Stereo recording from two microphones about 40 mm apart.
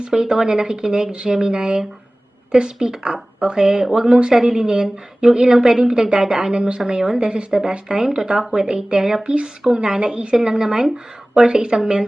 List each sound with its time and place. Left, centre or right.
0.1 s a woman's voice: centre